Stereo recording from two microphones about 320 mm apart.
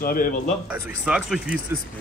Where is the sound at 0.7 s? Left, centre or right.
Centre.